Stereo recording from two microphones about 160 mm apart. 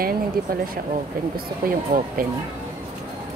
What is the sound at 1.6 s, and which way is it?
Speech, 65° right (ahead or behind).